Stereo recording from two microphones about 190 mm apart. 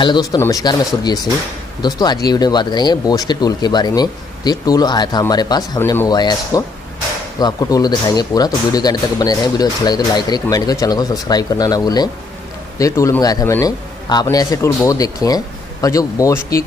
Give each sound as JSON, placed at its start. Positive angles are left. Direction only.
{"t": 0.0, "sound": "a man's voice", "side_deg": 25}